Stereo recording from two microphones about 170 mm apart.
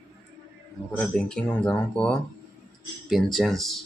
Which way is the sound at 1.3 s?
5° left (ahead or behind).